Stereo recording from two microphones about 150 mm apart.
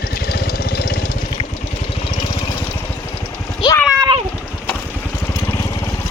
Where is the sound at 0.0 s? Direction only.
90° left.